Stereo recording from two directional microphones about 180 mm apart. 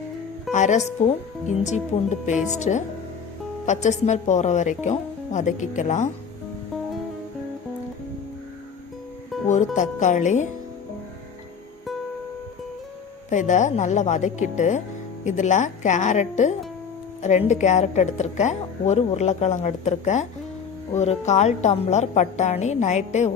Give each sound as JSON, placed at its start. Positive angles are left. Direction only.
{"t": 0.5, "sound": "a woman's voice", "side_deg": 40}
{"t": 9.3, "sound": "music", "side_deg": 0}
{"t": 9.7, "sound": "speech", "side_deg": 40}
{"t": 13.3, "sound": "a woman's voice", "side_deg": 45}